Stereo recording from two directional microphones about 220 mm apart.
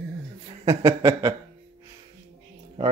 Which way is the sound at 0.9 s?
15° right (ahead or behind).